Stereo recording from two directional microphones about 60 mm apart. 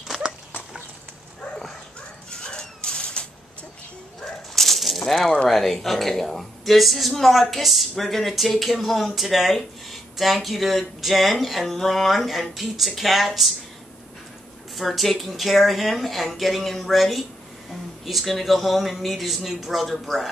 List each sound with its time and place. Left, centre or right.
0.1 s dog: centre
2.4 s music: centre
4.2 s a sound: centre
5.0 s speech: centre
14.8 s speech: centre